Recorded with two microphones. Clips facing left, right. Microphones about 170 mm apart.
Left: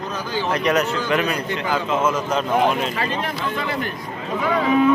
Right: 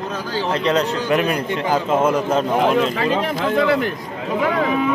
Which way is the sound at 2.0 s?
55° right (ahead or behind).